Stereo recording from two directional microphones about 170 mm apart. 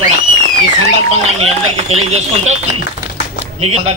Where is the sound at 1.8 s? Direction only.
40° right (ahead or behind).